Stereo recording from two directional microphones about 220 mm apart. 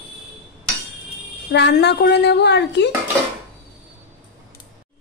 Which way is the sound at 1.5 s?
50° left (ahead or behind).